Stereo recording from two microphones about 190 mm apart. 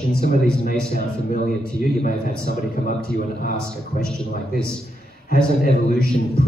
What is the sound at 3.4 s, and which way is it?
Speech, 50° left (ahead or behind).